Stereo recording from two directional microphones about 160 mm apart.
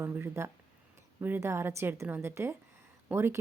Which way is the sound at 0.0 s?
15° right (ahead or behind).